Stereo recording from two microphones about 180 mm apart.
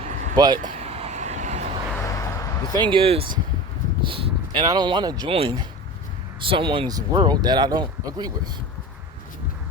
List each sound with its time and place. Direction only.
0.0 s a sound: 45° right (ahead or behind)
0.3 s speech: 25° right (ahead or behind)
0.6 s vehicle: 35° right (ahead or behind)
2.0 s vehicle: 15° left (ahead or behind)
2.7 s speech: 25° right (ahead or behind)